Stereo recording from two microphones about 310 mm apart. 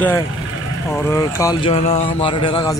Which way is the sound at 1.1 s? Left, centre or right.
Centre.